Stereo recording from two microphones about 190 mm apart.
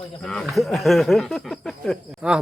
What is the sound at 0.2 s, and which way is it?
Speech, centre (ahead or behind).